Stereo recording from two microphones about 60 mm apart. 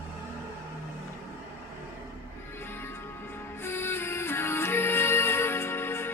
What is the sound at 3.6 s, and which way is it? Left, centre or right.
Music, left.